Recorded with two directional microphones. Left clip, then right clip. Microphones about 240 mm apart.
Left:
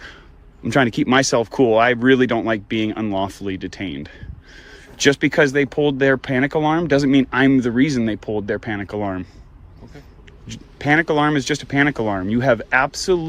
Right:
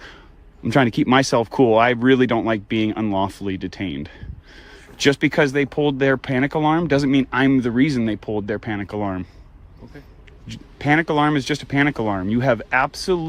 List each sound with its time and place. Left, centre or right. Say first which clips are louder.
0.6 s speech: even; right
10.4 s speech: left 1 dB; right